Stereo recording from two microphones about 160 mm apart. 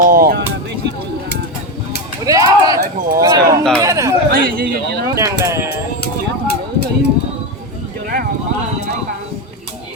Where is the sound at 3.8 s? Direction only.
20° right (ahead or behind).